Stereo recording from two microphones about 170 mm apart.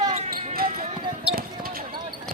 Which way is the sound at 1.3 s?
60° right (ahead or behind).